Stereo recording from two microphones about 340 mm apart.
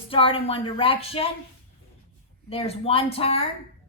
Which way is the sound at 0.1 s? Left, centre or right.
Centre.